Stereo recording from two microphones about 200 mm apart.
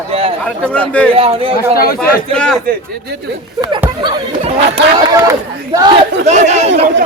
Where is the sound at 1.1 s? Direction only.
30° right (ahead or behind).